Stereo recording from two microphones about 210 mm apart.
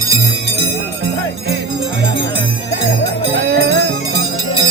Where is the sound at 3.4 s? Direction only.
50° right (ahead or behind).